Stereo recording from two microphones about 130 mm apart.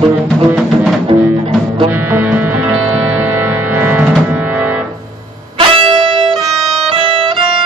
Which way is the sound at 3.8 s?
15° right (ahead or behind).